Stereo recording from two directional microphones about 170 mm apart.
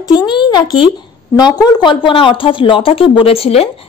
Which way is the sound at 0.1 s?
25° left (ahead or behind).